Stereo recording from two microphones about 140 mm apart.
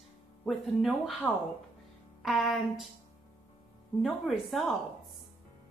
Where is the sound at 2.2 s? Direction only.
Centre (ahead or behind).